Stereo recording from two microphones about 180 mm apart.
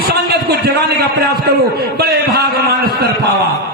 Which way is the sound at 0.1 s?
65° right (ahead or behind).